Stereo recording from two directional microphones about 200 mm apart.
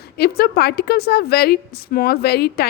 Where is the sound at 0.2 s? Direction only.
50° left (ahead or behind).